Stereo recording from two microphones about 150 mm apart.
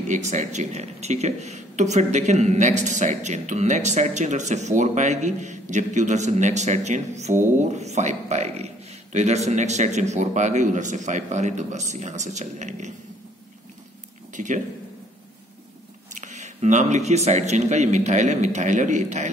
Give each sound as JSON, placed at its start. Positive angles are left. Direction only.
{"t": 0.1, "sound": "speech", "side_deg": -50}
{"t": 14.3, "sound": "speech", "side_deg": -55}
{"t": 16.1, "sound": "speech", "side_deg": -55}